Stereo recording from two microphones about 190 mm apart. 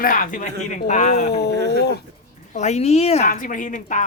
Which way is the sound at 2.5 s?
35° left (ahead or behind).